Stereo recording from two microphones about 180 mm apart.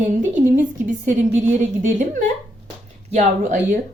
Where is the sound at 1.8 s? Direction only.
45° right (ahead or behind).